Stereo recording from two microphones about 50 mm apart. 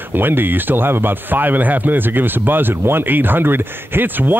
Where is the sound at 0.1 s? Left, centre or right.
Right.